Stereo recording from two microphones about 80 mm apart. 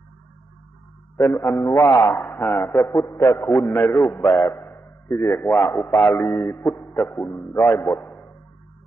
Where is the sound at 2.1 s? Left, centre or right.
Left.